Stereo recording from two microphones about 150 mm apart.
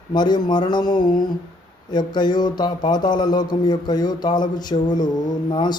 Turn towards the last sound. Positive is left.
turn(degrees=30)  # may be behind; listen again after turning